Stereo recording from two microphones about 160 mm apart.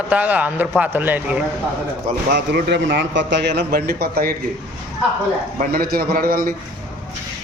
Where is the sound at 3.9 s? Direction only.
75° right (ahead or behind).